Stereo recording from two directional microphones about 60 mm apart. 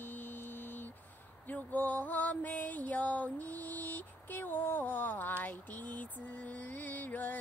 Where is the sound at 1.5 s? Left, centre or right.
Left.